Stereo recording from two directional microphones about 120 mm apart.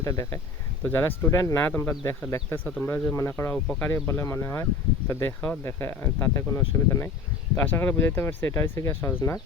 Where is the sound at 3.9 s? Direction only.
20° left (ahead or behind).